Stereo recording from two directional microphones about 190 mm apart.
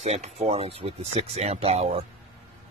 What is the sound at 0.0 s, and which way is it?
Speech, 35° right (ahead or behind).